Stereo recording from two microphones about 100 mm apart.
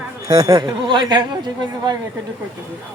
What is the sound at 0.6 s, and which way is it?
Speech, 50° right (ahead or behind).